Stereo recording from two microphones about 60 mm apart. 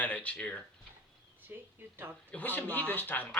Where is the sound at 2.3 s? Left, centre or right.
Left.